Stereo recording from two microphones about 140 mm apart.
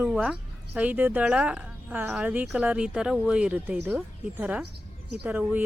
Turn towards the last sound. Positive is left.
turn(degrees=-10)  # may be behind; listen again after turning